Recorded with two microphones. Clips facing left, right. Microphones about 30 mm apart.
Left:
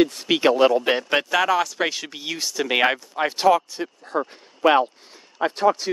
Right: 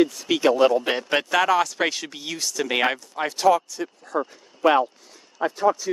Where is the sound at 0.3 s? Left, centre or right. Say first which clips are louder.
Left 1 dB; left.